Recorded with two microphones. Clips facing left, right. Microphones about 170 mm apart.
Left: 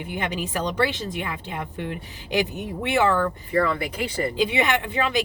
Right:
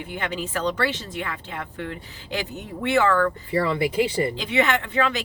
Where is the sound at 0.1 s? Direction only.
15° left (ahead or behind).